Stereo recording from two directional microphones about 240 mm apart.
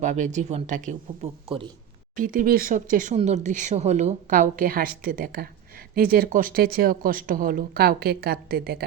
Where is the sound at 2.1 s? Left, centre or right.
Right.